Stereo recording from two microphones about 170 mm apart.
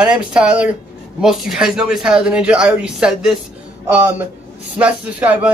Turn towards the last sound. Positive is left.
turn(degrees=-10)  # may be behind; listen again after turning